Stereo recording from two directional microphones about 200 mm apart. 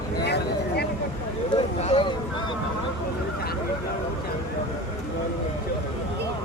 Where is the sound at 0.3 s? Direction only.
55° left (ahead or behind).